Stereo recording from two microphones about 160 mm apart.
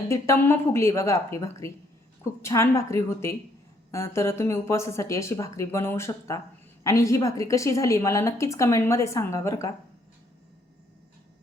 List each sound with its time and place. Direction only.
0.1 s a woman's voice: 15° left (ahead or behind)